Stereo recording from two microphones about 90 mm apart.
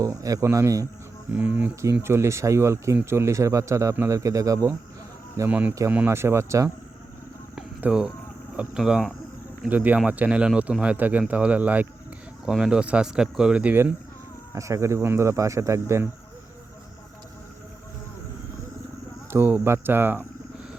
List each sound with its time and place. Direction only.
0.0 s speech: 40° right (ahead or behind)
1.3 s speech: 15° right (ahead or behind)
1.8 s speech: 30° right (ahead or behind)
5.5 s speech: 20° right (ahead or behind)
6.1 s speech: 30° right (ahead or behind)
7.8 s speech: 10° right (ahead or behind)
9.6 s speech: 20° right (ahead or behind)
14.5 s speech: 35° right (ahead or behind)
19.3 s speech: 25° right (ahead or behind)